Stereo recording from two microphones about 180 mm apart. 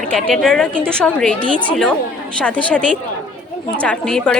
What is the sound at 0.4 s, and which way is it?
A woman's voice, 5° left (ahead or behind).